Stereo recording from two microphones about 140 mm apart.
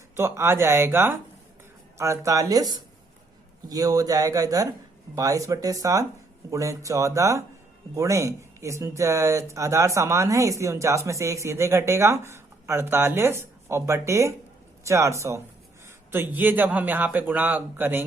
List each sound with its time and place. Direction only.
0.2 s speech: 20° right (ahead or behind)